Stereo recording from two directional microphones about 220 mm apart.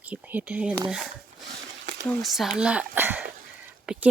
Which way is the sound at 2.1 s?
Centre (ahead or behind).